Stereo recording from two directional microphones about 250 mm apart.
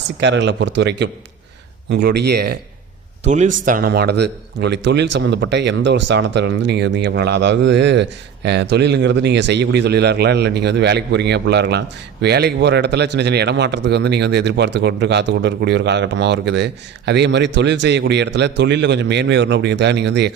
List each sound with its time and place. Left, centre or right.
0.2 s a man's voice: right
3.2 s a man's voice: right